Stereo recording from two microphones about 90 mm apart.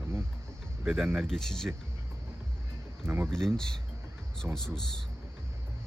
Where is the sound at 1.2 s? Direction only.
5° left (ahead or behind).